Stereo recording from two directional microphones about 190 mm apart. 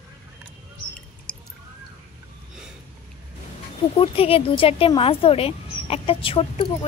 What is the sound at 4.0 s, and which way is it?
Speech, 30° left (ahead or behind).